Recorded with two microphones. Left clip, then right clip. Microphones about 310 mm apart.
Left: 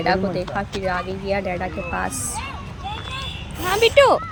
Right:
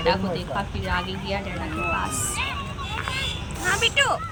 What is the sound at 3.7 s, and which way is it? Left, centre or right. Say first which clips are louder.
Speech: left 7 dB; centre.